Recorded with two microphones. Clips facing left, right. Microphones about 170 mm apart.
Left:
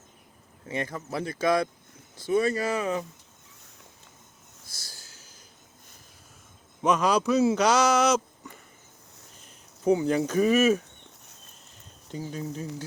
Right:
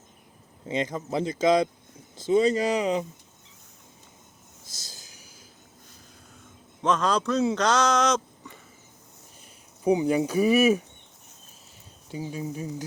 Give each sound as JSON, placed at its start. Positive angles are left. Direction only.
{"t": 0.6, "sound": "speech", "side_deg": -20}
{"t": 4.6, "sound": "a sound", "side_deg": -20}
{"t": 6.8, "sound": "speech", "side_deg": 10}
{"t": 9.8, "sound": "speech", "side_deg": -15}
{"t": 12.0, "sound": "speech", "side_deg": -10}